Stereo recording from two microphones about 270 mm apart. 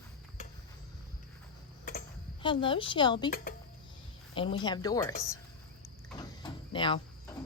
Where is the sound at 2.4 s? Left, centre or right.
Centre.